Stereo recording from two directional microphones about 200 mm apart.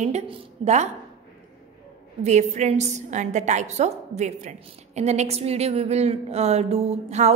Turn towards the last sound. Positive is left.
turn(degrees=-35)  # may be behind; listen again after turning